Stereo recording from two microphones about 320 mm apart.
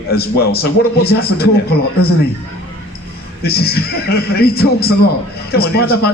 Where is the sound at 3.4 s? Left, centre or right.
Left.